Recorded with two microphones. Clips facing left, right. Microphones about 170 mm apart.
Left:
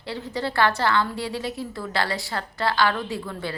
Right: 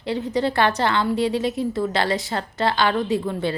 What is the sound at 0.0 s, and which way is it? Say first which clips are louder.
A woman's voice: right 7 dB; 20° right (ahead or behind).